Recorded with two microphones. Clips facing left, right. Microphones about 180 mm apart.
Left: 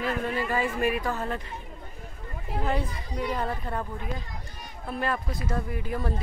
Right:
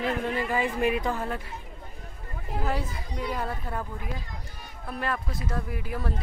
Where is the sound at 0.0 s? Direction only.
15° right (ahead or behind).